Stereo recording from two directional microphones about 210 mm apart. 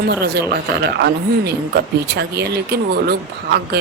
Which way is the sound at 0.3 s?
50° right (ahead or behind).